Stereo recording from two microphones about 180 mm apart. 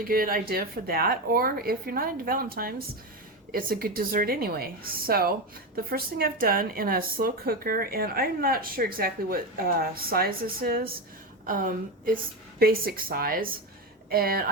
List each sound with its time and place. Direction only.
0.0 s a woman's voice: 55° right (ahead or behind)